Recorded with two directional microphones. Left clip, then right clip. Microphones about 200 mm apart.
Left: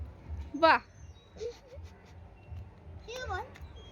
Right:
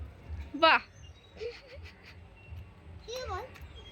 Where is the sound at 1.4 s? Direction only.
15° left (ahead or behind).